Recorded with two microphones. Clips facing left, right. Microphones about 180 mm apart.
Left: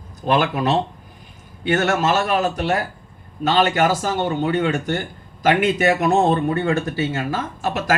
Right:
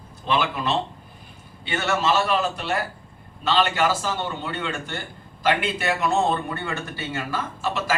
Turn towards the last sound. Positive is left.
turn(degrees=45)  # may be behind; listen again after turning